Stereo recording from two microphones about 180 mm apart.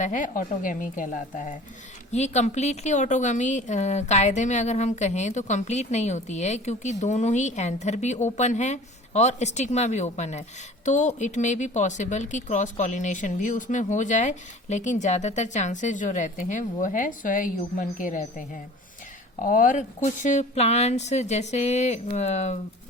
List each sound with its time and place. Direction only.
0.0 s a woman's voice: 45° left (ahead or behind)